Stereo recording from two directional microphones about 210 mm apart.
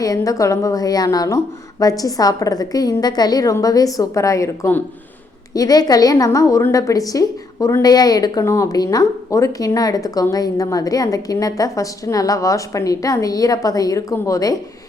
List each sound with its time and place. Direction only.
0.0 s a woman's voice: 15° left (ahead or behind)